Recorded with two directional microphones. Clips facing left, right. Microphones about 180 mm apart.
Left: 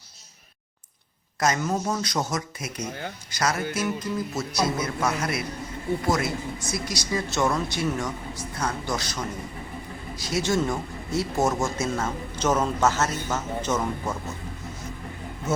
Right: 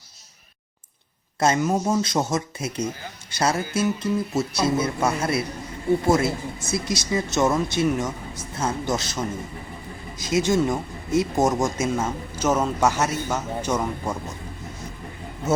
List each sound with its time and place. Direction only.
1.4 s speech: 25° right (ahead or behind)